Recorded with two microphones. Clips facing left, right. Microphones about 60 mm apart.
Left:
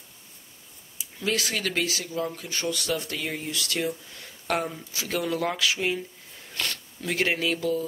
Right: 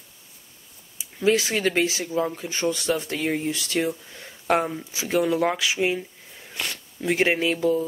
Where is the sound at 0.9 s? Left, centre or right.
Right.